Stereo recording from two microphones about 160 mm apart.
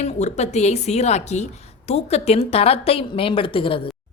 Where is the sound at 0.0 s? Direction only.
45° left (ahead or behind).